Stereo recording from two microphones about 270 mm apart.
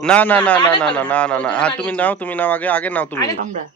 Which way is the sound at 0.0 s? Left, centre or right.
Centre.